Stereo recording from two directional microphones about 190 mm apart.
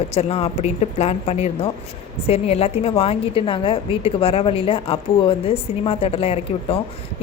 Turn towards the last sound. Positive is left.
turn(degrees=30)  # may be behind; listen again after turning